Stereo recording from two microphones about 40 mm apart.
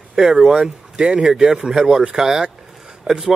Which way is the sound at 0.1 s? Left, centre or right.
Centre.